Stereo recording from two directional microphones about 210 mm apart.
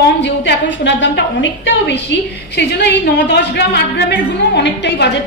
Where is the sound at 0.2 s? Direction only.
55° left (ahead or behind).